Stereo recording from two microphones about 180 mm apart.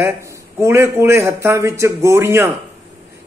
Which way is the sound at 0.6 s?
15° right (ahead or behind).